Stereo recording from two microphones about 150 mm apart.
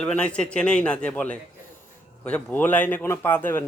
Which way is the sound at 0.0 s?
10° left (ahead or behind).